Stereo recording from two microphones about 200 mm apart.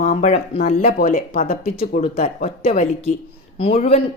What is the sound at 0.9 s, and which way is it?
A woman's voice, 45° left (ahead or behind).